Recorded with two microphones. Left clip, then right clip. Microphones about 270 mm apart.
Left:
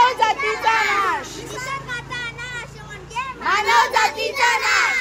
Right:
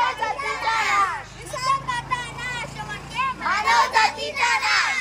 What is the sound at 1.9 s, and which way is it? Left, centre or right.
Vehicle, centre.